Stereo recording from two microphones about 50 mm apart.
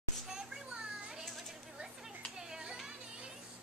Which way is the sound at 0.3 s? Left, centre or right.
Centre.